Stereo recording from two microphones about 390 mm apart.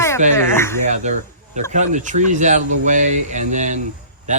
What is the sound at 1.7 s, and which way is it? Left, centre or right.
Speech, centre.